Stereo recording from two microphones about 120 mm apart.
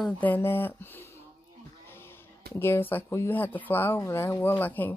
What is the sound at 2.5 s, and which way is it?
Speech, 20° left (ahead or behind).